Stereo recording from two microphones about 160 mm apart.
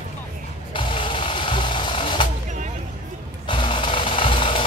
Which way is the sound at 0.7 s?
35° left (ahead or behind).